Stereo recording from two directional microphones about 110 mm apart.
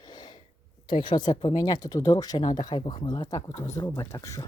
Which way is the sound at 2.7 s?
45° left (ahead or behind).